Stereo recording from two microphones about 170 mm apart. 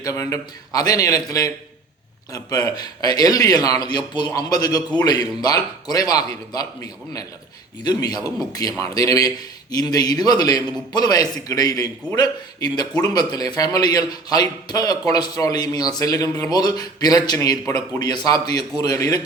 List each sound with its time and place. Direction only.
0.0 s a man's voice: 20° left (ahead or behind)